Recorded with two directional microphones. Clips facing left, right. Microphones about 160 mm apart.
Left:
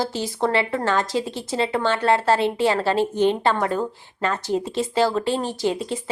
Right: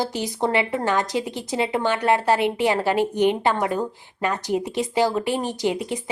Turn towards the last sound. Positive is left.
turn(degrees=-15)  # may be behind; listen again after turning